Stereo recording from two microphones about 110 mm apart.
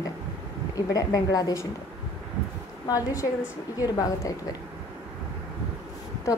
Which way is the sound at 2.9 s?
30° left (ahead or behind).